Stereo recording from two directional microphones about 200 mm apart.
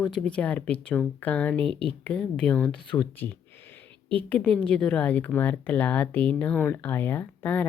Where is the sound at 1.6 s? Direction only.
25° right (ahead or behind).